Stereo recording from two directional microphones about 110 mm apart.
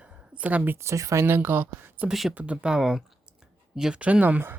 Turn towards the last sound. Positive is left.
turn(degrees=-15)  # may be behind; listen again after turning